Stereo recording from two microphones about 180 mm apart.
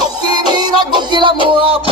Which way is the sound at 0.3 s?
25° right (ahead or behind).